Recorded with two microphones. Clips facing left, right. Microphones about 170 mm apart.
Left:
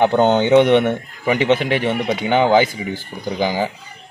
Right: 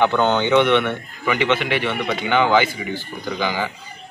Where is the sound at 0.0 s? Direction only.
40° left (ahead or behind).